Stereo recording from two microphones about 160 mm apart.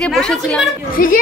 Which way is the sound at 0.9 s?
60° left (ahead or behind).